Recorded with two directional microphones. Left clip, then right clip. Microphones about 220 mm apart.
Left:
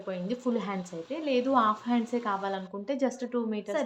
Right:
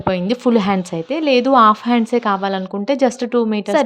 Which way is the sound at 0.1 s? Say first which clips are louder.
Right 15 dB; 45° right (ahead or behind).